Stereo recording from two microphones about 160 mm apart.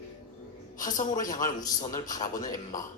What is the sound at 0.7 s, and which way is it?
A man's voice, 55° left (ahead or behind).